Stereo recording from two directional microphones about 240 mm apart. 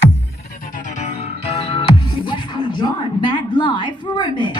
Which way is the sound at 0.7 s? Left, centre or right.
Left.